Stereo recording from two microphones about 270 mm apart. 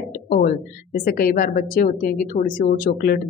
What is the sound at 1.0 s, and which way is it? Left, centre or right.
Speech, left.